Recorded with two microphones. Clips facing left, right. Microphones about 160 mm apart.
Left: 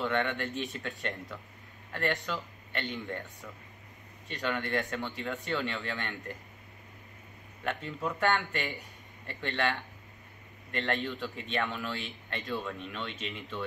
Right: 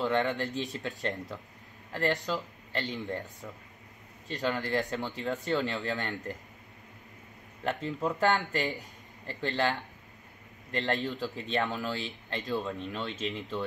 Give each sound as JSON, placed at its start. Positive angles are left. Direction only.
{"t": 0.0, "sound": "speech", "side_deg": -35}
{"t": 4.3, "sound": "speech", "side_deg": -35}
{"t": 7.6, "sound": "speech", "side_deg": -35}